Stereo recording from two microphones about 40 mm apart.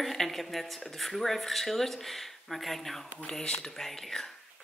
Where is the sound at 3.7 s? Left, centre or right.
Centre.